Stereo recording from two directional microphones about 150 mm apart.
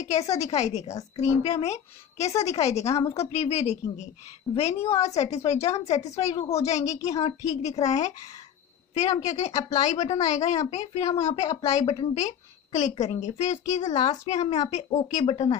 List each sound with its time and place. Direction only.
0.4 s a woman's voice: 50° left (ahead or behind)